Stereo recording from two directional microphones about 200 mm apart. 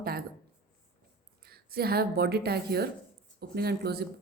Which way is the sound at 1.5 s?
50° right (ahead or behind).